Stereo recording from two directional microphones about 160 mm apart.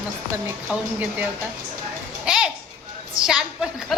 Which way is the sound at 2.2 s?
5° right (ahead or behind).